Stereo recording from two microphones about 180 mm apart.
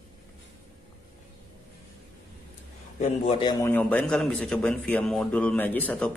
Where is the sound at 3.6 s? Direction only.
10° left (ahead or behind).